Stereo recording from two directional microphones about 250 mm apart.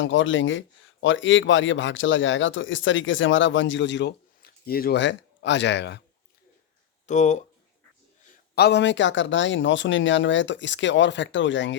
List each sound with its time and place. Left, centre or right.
0.0 s speech: left
7.1 s speech: left
8.5 s speech: left